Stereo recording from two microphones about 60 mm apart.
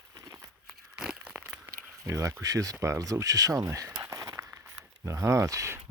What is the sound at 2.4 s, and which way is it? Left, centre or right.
Speech, right.